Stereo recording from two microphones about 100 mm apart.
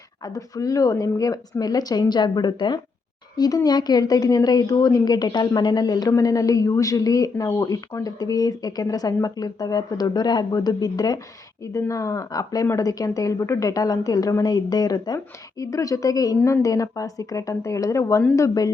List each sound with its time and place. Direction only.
0.3 s a woman's voice: 35° left (ahead or behind)